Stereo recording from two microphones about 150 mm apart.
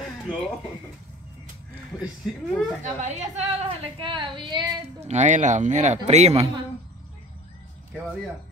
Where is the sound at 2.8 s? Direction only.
50° right (ahead or behind); by 4.6 s 30° right (ahead or behind).